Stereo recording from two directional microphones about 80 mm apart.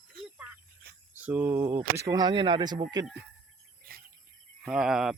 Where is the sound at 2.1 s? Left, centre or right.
Right.